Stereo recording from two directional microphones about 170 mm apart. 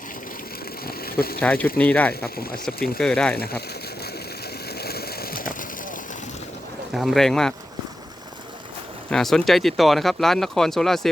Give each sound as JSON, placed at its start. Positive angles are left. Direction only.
{"t": 0.9, "sound": "a sound", "side_deg": 65}
{"t": 1.4, "sound": "speech", "side_deg": 10}
{"t": 2.2, "sound": "speech", "side_deg": 60}
{"t": 3.0, "sound": "speech", "side_deg": 5}
{"t": 3.3, "sound": "speech", "side_deg": 65}
{"t": 4.8, "sound": "a sound", "side_deg": 65}
{"t": 6.9, "sound": "speech", "side_deg": 0}
{"t": 9.0, "sound": "speech", "side_deg": 5}